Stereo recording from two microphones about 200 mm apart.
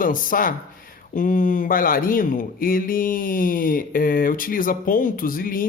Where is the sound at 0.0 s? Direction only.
45° left (ahead or behind).